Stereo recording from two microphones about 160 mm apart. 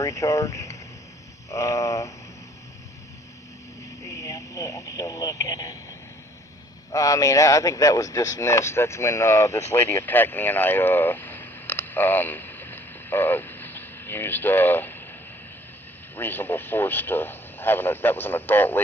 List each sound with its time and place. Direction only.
0.0 s speech: 20° left (ahead or behind)
1.5 s a sound: 20° left (ahead or behind)
4.0 s radio: 20° left (ahead or behind)
6.9 s speech: 20° left (ahead or behind)
16.1 s speech: 15° left (ahead or behind)